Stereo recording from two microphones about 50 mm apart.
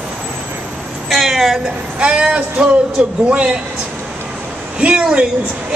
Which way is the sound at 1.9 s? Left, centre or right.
Right.